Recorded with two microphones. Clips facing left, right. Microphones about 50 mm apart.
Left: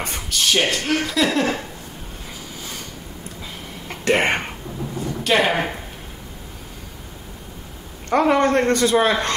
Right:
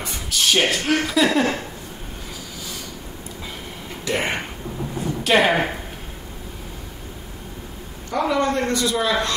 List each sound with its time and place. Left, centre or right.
0.3 s speech: centre
4.0 s speech: left
5.2 s speech: centre
8.1 s speech: left